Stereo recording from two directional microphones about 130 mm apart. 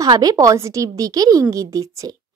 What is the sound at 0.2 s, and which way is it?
A woman's voice, 30° right (ahead or behind).